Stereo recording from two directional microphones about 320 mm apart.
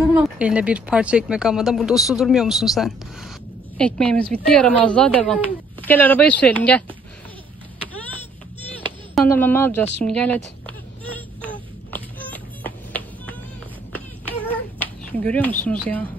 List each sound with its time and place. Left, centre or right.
0.1 s speech: centre
9.1 s a sound: centre
15.6 s speech: centre